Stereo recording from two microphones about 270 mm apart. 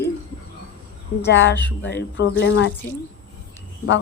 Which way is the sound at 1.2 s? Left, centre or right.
Left.